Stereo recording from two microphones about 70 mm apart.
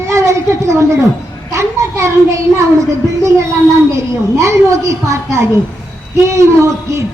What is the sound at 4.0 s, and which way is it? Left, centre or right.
A child's voice, right.